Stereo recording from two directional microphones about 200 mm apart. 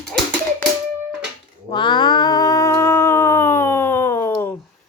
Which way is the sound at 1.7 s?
25° left (ahead or behind).